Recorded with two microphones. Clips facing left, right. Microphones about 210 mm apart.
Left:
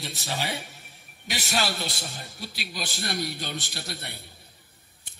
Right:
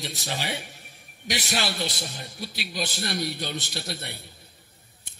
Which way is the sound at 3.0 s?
50° left (ahead or behind).